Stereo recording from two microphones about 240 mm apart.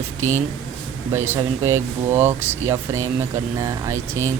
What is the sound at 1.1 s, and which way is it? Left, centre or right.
Speech, centre.